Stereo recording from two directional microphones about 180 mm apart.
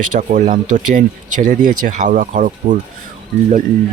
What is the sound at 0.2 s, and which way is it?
Speech, 45° right (ahead or behind).